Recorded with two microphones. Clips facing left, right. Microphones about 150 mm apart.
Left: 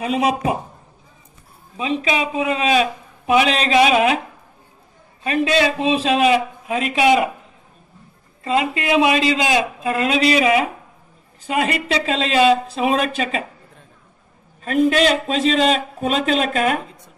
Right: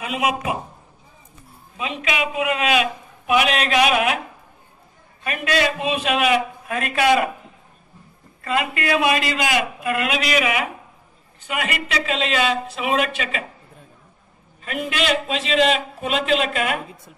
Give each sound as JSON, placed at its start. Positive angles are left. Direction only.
{"t": 0.0, "sound": "a man's voice", "side_deg": 35}
{"t": 1.8, "sound": "a man's voice", "side_deg": 30}
{"t": 5.2, "sound": "a man's voice", "side_deg": 25}
{"t": 6.7, "sound": "a man's voice", "side_deg": 20}
{"t": 8.4, "sound": "a man's voice", "side_deg": 25}
{"t": 14.6, "sound": "a man's voice", "side_deg": 40}